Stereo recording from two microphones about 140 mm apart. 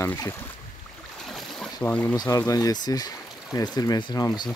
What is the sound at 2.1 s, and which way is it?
Speech, 25° left (ahead or behind).